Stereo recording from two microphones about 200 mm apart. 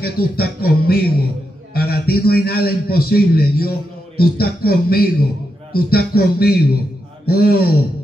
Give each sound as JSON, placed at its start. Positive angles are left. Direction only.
{"t": 0.0, "sound": "a man's voice", "side_deg": 50}